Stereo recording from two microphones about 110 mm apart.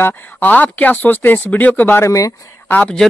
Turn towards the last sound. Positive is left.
turn(degrees=10)  # may be behind; listen again after turning